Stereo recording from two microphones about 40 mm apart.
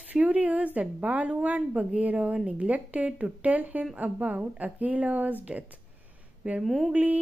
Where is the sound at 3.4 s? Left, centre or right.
Right.